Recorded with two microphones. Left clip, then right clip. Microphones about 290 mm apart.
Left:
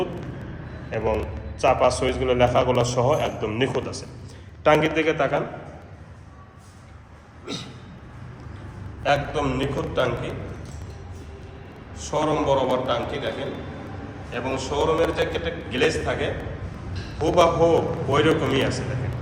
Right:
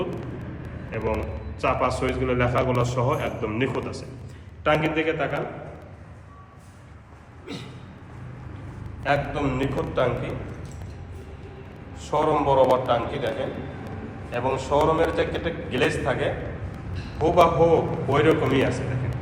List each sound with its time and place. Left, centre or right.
0.9 s a man's voice: centre
4.6 s a man's voice: left
7.5 s a sound: centre
9.0 s a man's voice: centre
11.9 s a man's voice: centre
14.3 s a man's voice: centre